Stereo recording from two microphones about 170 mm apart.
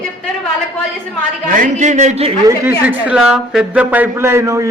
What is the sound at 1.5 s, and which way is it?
Speech, 50° right (ahead or behind).